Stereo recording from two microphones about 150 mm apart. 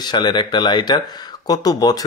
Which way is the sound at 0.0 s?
30° left (ahead or behind).